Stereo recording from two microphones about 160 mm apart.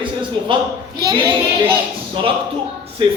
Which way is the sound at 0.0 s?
30° right (ahead or behind).